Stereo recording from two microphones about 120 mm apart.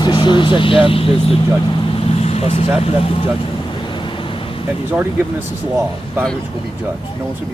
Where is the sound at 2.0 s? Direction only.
60° left (ahead or behind).